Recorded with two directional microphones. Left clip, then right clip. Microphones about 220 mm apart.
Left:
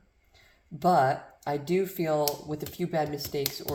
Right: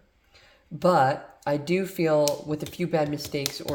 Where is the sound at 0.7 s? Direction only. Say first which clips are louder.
Right 2 dB; 45° right (ahead or behind).